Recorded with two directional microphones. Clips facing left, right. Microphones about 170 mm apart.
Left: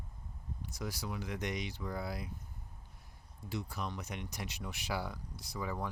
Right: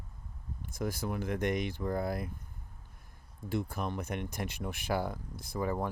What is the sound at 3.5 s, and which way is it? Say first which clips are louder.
Speech: right 6 dB; 50° right (ahead or behind).